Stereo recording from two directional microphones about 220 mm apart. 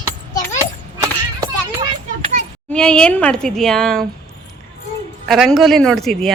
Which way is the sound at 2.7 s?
5° left (ahead or behind).